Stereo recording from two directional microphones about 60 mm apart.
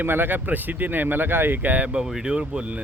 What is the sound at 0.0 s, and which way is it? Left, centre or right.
Speech, right.